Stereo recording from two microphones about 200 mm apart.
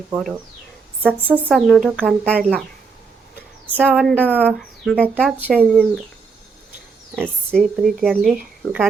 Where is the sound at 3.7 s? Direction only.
5° right (ahead or behind).